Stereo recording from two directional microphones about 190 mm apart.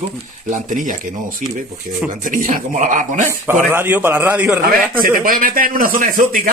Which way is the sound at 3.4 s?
10° right (ahead or behind).